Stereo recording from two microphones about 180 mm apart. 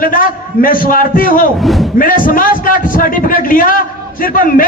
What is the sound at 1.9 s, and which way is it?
A man's voice, 50° left (ahead or behind).